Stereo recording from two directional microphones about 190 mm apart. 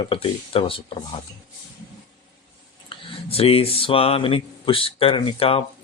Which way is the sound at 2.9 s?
30° left (ahead or behind).